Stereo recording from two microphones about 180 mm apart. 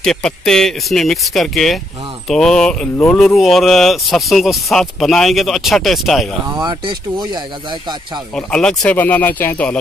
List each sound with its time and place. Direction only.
0.0 s speech: 5° left (ahead or behind)
6.5 s speech: 25° right (ahead or behind)
8.4 s speech: 5° left (ahead or behind)